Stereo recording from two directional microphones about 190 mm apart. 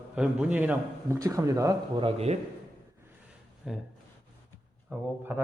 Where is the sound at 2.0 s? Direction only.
35° right (ahead or behind).